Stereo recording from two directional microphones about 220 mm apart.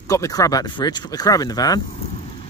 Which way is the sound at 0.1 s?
15° left (ahead or behind).